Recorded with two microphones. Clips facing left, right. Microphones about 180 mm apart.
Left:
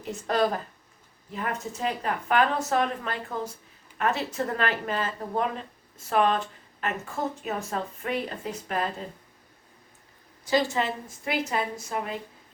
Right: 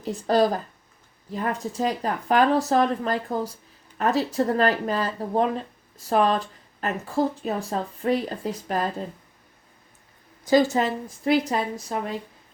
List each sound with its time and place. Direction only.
0.0 s speech: 35° right (ahead or behind)
10.5 s speech: 40° right (ahead or behind)